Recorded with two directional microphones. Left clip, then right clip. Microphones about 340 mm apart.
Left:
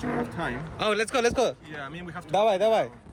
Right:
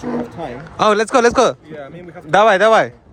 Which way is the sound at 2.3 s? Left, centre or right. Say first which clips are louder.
Right 11 dB; right.